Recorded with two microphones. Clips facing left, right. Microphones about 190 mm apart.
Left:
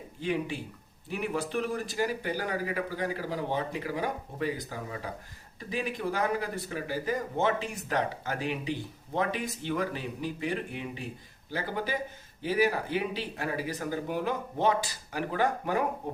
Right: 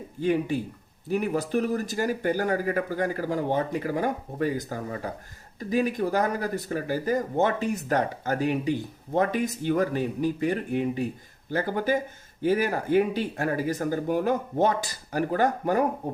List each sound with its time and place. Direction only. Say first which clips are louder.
0.2 s speech: right 7 dB; 45° right (ahead or behind)